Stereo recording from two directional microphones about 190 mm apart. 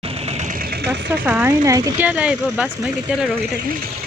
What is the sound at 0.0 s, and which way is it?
Sewing machine, 30° right (ahead or behind).